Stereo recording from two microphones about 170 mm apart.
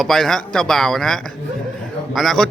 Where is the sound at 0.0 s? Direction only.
Centre (ahead or behind).